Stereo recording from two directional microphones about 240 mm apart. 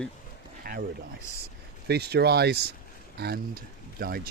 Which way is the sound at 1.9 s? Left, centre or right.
Right.